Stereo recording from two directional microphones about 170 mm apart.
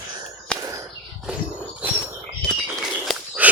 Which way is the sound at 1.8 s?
10° right (ahead or behind).